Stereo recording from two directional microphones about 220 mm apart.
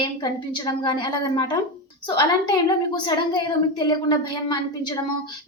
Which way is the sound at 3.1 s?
20° left (ahead or behind).